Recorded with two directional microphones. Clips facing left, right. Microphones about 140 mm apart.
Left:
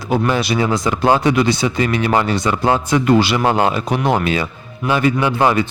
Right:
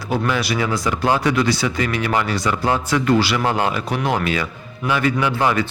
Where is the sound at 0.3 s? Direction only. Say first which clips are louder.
Left 3 dB; 25° left (ahead or behind).